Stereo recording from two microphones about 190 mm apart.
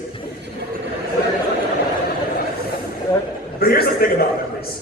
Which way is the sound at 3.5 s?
55° left (ahead or behind).